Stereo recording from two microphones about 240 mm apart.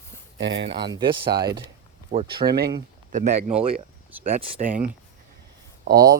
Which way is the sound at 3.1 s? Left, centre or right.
Right.